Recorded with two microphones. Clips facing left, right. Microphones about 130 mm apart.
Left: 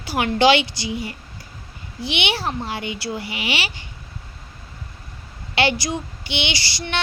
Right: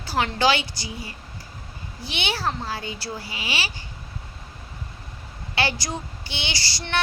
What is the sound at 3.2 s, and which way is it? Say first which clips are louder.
Speech: left 5 dB; 65° left (ahead or behind).